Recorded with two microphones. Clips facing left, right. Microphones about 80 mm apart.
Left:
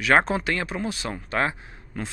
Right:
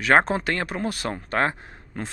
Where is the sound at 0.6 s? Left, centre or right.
Right.